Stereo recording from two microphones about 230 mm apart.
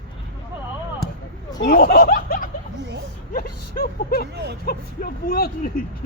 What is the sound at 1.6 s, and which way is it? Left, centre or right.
Speech, left.